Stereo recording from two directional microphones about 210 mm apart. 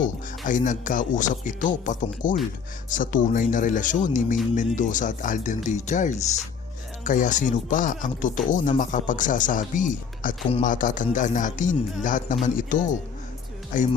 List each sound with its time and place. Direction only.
0.0 s speech: 40° left (ahead or behind)